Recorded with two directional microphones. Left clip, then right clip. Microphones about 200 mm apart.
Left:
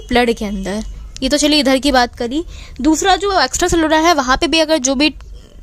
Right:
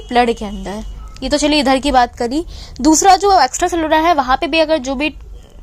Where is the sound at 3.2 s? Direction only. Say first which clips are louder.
Right 3 dB; 30° left (ahead or behind).